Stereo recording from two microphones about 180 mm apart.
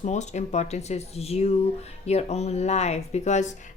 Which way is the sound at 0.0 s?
40° left (ahead or behind).